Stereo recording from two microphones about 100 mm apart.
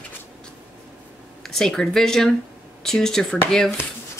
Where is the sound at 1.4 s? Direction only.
5° left (ahead or behind).